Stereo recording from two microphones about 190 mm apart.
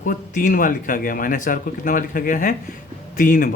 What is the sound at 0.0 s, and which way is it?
Speech, 45° left (ahead or behind).